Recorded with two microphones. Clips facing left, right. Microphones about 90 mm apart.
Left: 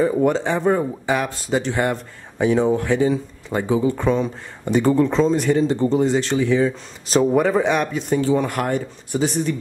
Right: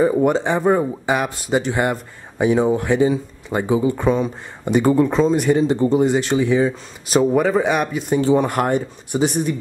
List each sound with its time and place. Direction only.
0.0 s speech: 15° right (ahead or behind)
7.2 s speech: centre (ahead or behind)
8.2 s speech: 20° right (ahead or behind)